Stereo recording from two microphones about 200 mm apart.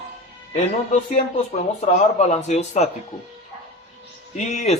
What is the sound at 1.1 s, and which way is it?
Speech, 30° left (ahead or behind).